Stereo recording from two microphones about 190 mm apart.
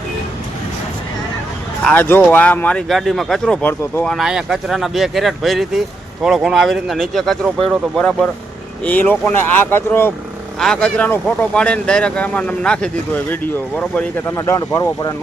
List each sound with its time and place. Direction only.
1.8 s speech: 10° left (ahead or behind)